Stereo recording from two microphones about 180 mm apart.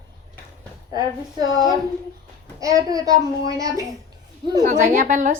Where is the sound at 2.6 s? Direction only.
20° right (ahead or behind).